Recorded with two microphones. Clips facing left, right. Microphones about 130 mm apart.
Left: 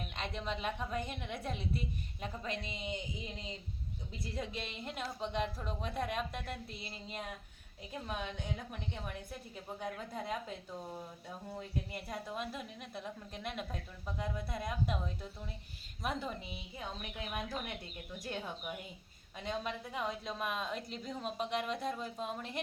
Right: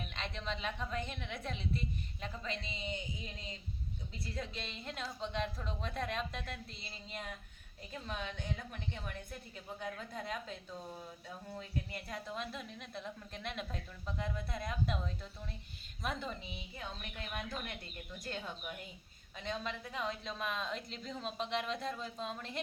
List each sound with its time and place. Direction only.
0.2 s a woman's voice: 10° left (ahead or behind)